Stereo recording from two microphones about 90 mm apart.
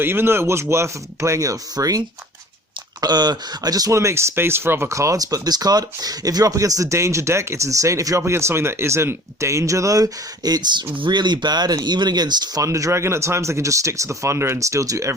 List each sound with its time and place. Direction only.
0.0 s speech: 25° right (ahead or behind); by 12.6 s 50° right (ahead or behind)
12.6 s speech: 35° right (ahead or behind)